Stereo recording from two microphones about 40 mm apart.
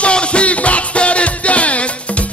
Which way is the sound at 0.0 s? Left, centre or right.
Left.